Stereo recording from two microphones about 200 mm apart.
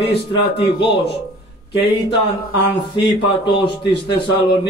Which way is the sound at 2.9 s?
25° left (ahead or behind).